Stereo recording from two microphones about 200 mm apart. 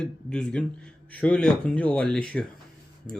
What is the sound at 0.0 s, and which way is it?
Speech, 5° left (ahead or behind).